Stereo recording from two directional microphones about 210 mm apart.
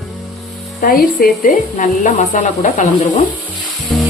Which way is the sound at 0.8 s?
45° left (ahead or behind).